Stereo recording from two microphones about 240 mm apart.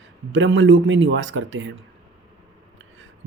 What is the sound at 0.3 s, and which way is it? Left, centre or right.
Speech, right.